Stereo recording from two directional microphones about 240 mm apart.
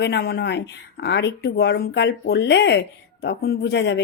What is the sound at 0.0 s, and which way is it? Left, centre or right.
Speech, left.